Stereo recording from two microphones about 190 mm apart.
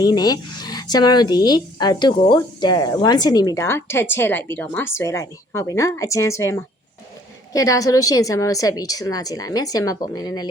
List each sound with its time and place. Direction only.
0.0 s a woman's voice: 20° left (ahead or behind)